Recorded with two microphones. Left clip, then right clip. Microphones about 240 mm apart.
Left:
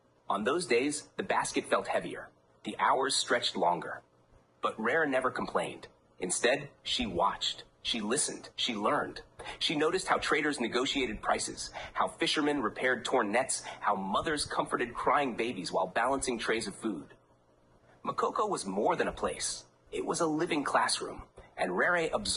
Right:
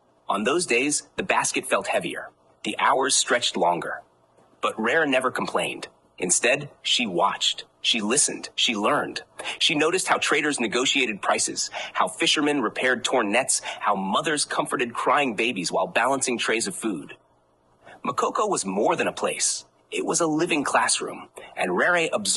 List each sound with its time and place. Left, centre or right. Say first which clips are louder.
0.3 s speech: right 7 dB; right
18.0 s speech: right 7 dB; right